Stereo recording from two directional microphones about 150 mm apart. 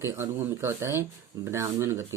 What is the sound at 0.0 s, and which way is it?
Speech, 15° right (ahead or behind).